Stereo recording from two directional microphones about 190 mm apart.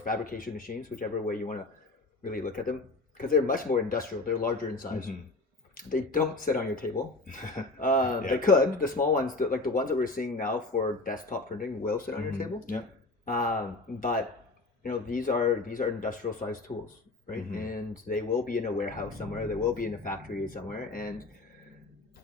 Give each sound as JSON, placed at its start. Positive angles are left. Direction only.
{"t": 0.0, "sound": "speech", "side_deg": 45}
{"t": 14.8, "sound": "speech", "side_deg": 45}